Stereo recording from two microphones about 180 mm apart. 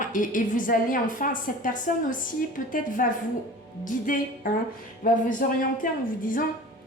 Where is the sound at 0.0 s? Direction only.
45° left (ahead or behind).